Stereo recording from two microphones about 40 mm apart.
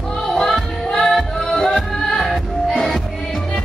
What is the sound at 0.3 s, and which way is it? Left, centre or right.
Music, centre.